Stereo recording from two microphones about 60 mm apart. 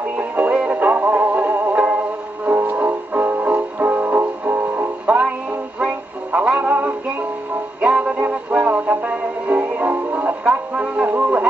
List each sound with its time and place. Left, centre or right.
0.2 s music: right